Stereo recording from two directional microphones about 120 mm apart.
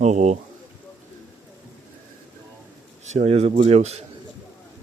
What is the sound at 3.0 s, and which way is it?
Speech, 70° right (ahead or behind).